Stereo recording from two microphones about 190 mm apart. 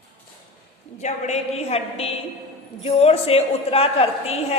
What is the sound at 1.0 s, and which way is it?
A man's voice, 35° left (ahead or behind).